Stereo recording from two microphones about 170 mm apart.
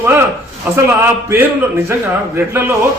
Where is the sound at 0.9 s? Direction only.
15° right (ahead or behind).